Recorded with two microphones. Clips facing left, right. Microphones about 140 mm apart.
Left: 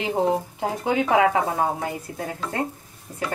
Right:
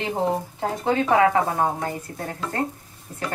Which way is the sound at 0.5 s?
15° left (ahead or behind).